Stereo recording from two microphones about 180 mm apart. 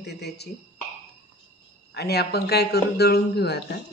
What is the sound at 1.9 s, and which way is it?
A man's voice, 65° left (ahead or behind).